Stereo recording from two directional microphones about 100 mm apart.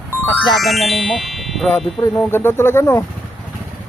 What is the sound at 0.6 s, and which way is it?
Speech, centre (ahead or behind).